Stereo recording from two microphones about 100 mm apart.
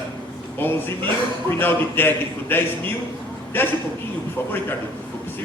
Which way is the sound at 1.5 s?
20° left (ahead or behind).